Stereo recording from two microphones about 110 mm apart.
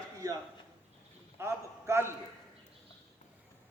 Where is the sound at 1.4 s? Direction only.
20° right (ahead or behind).